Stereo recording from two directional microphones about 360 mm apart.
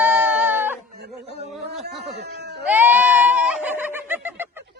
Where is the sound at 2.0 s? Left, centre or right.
Right.